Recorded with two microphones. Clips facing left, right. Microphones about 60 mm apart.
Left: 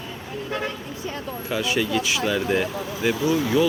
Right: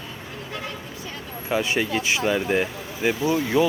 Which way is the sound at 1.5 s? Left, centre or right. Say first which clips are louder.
Right 1 dB; right.